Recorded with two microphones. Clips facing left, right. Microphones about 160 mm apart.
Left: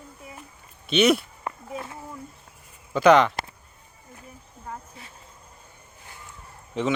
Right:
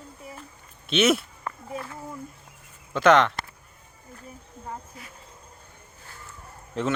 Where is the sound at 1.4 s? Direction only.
20° left (ahead or behind).